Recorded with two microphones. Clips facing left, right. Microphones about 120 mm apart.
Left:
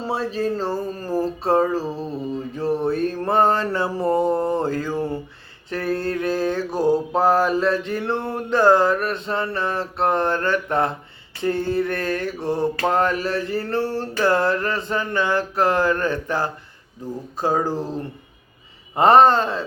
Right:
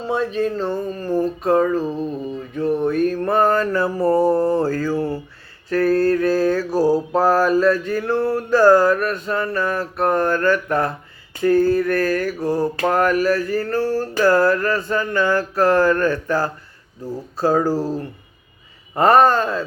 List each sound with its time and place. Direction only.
0.0 s speech: 35° left (ahead or behind)
2.6 s mantra: 30° left (ahead or behind)
17.3 s speech: 15° left (ahead or behind)
18.9 s mantra: 25° left (ahead or behind)